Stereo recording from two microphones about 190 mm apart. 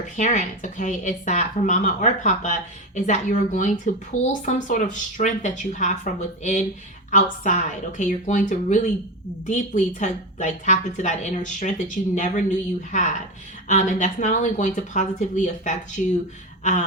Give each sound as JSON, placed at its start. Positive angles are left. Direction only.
{"t": 0.2, "sound": "speech", "side_deg": 40}